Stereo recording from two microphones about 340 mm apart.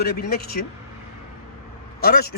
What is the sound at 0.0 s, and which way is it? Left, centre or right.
Speech, left.